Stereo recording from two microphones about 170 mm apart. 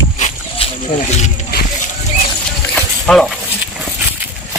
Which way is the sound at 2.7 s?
5° left (ahead or behind).